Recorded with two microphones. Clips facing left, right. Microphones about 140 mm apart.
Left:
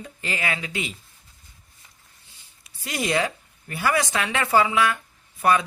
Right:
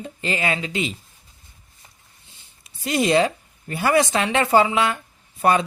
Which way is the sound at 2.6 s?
25° right (ahead or behind).